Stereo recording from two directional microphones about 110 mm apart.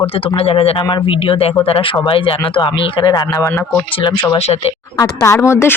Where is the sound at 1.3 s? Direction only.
55° left (ahead or behind).